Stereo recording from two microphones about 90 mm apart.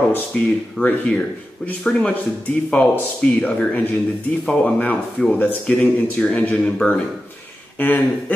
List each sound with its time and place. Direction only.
0.1 s speech: 15° left (ahead or behind)